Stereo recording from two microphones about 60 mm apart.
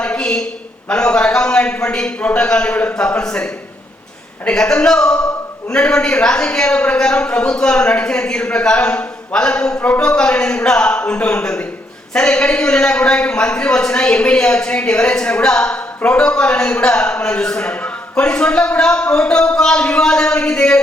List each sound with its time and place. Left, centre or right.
0.0 s a sound: centre
0.9 s a man's voice: centre
4.5 s a man's voice: centre
10.0 s a man's voice: centre